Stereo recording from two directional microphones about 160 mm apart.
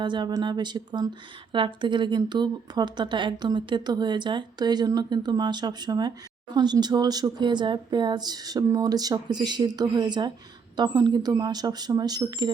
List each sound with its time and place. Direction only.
0.0 s a woman's voice: 30° right (ahead or behind)